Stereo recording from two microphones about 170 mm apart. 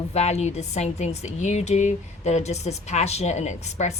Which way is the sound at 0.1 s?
40° left (ahead or behind).